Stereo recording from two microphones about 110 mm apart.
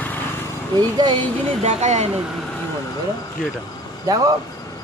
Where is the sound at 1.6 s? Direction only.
85° right.